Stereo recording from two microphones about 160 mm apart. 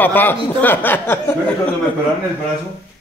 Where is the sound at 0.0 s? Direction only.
10° left (ahead or behind).